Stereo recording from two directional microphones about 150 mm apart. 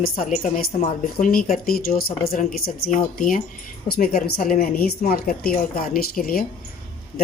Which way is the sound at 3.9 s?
80° left.